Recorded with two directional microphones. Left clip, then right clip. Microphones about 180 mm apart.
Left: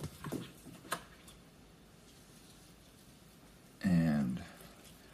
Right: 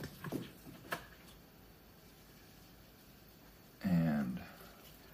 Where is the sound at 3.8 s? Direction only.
40° left (ahead or behind).